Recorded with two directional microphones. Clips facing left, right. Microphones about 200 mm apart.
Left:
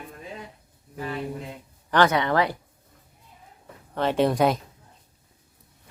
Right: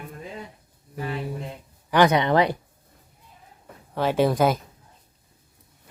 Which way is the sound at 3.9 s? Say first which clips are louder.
Right 1 dB; 5° right (ahead or behind).